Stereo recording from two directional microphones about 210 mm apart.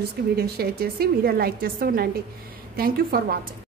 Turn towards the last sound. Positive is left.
turn(degrees=-45)  # may be behind; listen again after turning